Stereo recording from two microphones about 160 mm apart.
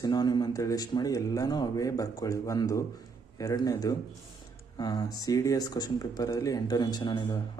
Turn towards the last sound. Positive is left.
turn(degrees=25)  # may be behind; listen again after turning